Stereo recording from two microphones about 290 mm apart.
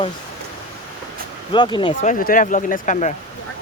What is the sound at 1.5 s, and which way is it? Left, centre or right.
Speech, centre.